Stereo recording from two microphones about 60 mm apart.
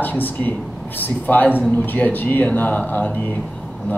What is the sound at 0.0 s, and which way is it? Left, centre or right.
A man's voice, left.